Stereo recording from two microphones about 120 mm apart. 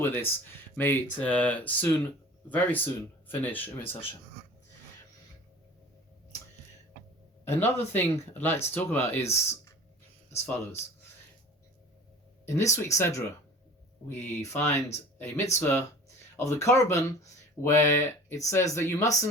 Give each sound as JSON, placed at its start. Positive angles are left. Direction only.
{"t": 0.0, "sound": "speech", "side_deg": 15}
{"t": 7.6, "sound": "speech", "side_deg": 15}
{"t": 12.5, "sound": "speech", "side_deg": 25}